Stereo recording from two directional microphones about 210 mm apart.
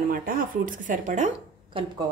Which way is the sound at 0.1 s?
40° right (ahead or behind).